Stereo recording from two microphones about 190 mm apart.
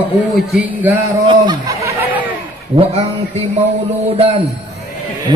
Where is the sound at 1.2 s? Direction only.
20° right (ahead or behind).